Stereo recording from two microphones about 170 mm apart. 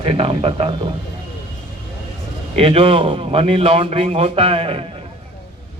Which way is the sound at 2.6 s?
35° right (ahead or behind).